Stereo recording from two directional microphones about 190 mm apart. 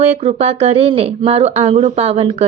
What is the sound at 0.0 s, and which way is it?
Speech, 35° right (ahead or behind).